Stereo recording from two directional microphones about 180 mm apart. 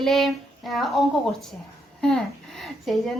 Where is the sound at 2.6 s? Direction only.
Centre (ahead or behind).